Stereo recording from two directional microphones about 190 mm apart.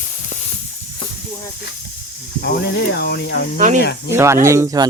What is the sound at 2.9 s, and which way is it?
Speech, 60° left (ahead or behind).